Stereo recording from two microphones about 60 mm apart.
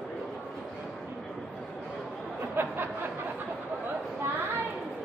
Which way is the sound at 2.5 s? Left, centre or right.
Right.